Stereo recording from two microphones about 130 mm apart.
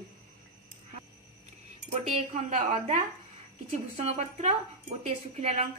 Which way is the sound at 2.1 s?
70° right (ahead or behind).